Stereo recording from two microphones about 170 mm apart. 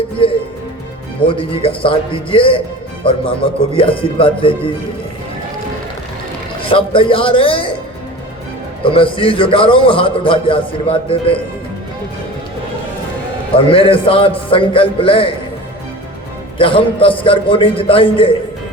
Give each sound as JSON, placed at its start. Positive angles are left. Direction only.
{"t": 0.2, "sound": "a man's voice", "side_deg": 30}
{"t": 6.7, "sound": "a man's voice", "side_deg": 30}
{"t": 8.8, "sound": "a man's voice", "side_deg": 30}
{"t": 13.7, "sound": "a man's voice", "side_deg": 30}
{"t": 16.6, "sound": "a man's voice", "side_deg": 30}